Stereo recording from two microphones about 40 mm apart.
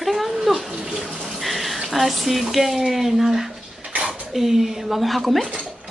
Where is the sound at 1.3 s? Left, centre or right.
Centre.